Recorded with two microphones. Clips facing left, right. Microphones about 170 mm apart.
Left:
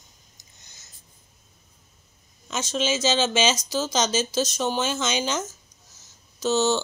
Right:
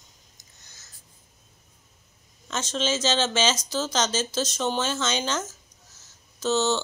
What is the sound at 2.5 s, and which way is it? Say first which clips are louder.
Speech: left 1 dB; 10° left (ahead or behind).